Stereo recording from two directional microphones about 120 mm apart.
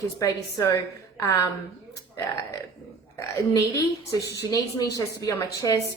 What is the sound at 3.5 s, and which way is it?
A woman's voice, 30° left (ahead or behind).